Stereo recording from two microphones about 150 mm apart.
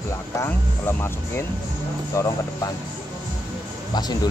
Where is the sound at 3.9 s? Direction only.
25° left (ahead or behind).